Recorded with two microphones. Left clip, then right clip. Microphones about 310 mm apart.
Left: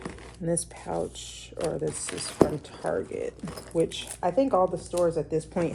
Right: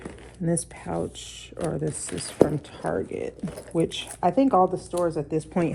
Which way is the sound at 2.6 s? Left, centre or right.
Right.